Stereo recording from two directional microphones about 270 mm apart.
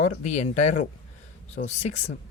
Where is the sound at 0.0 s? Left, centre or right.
Left.